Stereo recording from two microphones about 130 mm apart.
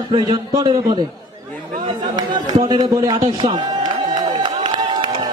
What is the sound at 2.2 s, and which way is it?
Speech, 35° right (ahead or behind).